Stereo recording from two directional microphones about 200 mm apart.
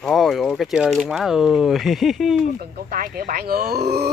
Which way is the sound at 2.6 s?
50° right (ahead or behind).